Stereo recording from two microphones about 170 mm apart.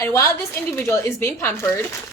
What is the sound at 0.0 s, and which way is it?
A woman's voice, 15° left (ahead or behind).